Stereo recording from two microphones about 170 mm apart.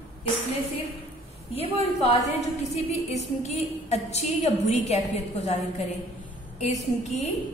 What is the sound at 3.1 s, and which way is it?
A woman's voice, 40° left (ahead or behind).